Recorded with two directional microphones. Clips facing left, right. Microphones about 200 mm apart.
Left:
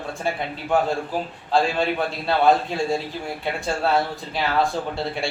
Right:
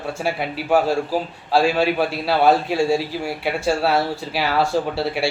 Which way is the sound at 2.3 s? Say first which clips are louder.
Right 1 dB; 5° right (ahead or behind).